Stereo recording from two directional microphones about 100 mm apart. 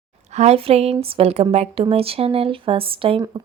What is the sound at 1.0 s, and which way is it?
Speech, 70° right (ahead or behind).